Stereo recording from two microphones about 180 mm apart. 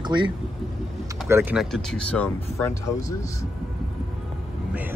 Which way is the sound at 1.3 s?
10° right (ahead or behind).